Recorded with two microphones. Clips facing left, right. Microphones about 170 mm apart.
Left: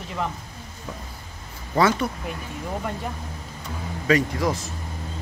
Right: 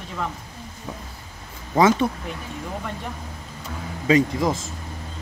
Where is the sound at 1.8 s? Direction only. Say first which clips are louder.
Right 3 dB; 20° right (ahead or behind).